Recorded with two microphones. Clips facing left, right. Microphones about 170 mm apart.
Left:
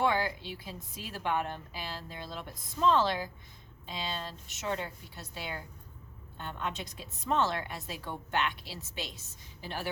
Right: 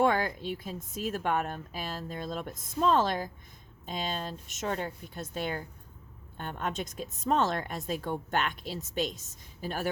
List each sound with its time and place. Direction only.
0.0 s a woman's voice: 45° right (ahead or behind)